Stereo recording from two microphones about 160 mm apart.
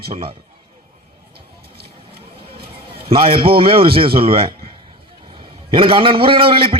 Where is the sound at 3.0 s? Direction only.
35° right (ahead or behind).